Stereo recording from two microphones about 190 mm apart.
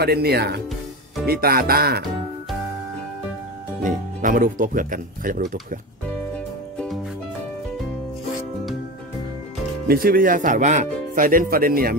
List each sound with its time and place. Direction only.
0.0 s speech: 55° right (ahead or behind)
3.8 s speech: 45° right (ahead or behind)
9.8 s speech: 50° right (ahead or behind)